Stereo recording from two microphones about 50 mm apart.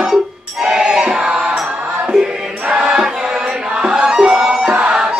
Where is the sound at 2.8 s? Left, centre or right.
Centre.